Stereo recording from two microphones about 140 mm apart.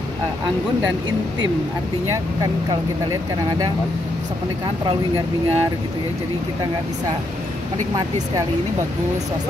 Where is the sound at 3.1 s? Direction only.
25° right (ahead or behind).